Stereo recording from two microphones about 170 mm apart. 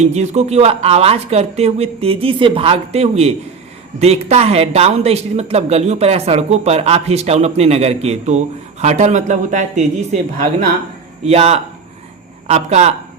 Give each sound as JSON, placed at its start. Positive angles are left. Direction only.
{"t": 0.0, "sound": "a man's voice", "side_deg": -40}